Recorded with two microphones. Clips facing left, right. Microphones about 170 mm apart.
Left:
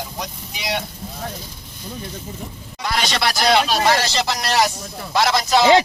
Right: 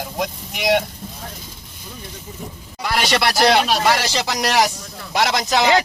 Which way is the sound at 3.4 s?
65° right (ahead or behind).